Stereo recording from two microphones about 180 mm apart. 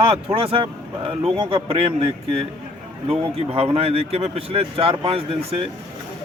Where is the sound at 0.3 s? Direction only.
30° right (ahead or behind).